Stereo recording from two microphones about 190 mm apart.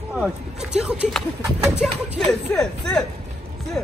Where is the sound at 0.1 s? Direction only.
5° right (ahead or behind).